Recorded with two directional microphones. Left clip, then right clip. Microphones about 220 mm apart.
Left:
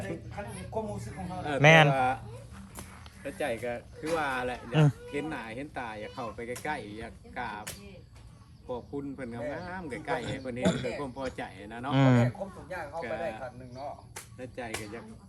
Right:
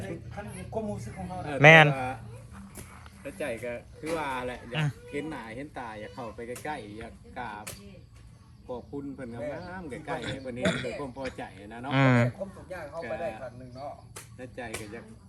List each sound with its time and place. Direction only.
0.7 s speech: 15° right (ahead or behind)
1.5 s a man's voice: 10° left (ahead or behind)
3.2 s speech: centre (ahead or behind)
4.7 s a man's voice: 30° left (ahead or behind)
5.1 s speech: centre (ahead or behind)
8.6 s speech: centre (ahead or behind)
10.6 s a man's voice: 15° left (ahead or behind)
10.8 s speech: centre (ahead or behind)
11.9 s a man's voice: 15° left (ahead or behind)
13.0 s speech: centre (ahead or behind)